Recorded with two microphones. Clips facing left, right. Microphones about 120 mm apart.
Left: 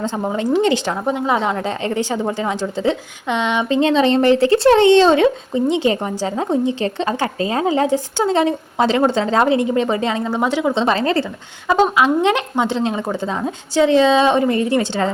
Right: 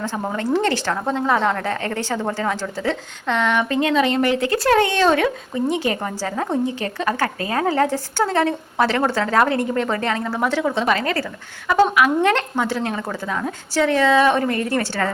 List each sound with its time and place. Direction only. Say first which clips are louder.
0.0 s speech: left 4 dB; 20° left (ahead or behind)
10.7 s speech: left 3 dB; 30° left (ahead or behind)